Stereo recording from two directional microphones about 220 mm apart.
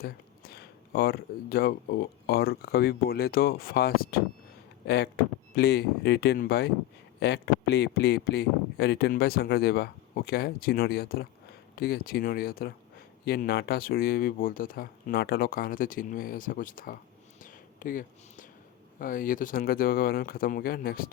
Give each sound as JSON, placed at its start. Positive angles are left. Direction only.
{"t": 0.0, "sound": "speech", "side_deg": 45}
{"t": 17.4, "sound": "a sound", "side_deg": 40}
{"t": 18.9, "sound": "speech", "side_deg": 40}